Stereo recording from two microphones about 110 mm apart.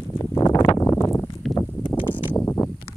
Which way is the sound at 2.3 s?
20° left (ahead or behind).